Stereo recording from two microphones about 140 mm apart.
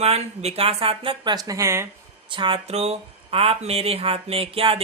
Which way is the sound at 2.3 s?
35° right (ahead or behind).